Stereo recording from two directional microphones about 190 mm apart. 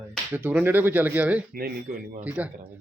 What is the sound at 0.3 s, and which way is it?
Speech, 10° right (ahead or behind).